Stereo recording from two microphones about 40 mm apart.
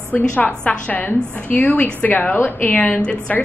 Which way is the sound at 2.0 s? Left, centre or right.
Left.